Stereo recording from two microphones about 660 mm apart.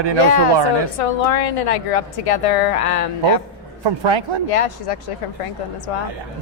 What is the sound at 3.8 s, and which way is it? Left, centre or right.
Speech, right.